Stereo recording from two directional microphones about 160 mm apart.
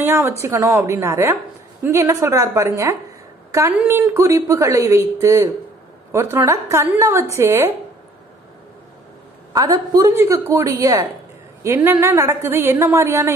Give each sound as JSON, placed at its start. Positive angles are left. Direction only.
{"t": 0.0, "sound": "a sound", "side_deg": -15}
{"t": 0.4, "sound": "a woman's voice", "side_deg": -20}
{"t": 9.5, "sound": "a woman's voice", "side_deg": -25}